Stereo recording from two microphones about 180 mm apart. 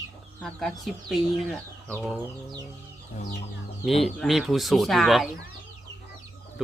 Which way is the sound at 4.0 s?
Centre (ahead or behind).